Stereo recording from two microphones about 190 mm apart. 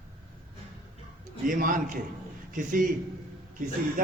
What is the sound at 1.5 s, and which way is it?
Speech, 45° right (ahead or behind).